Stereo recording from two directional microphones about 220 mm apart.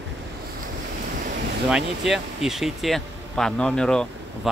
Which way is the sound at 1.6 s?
Centre (ahead or behind).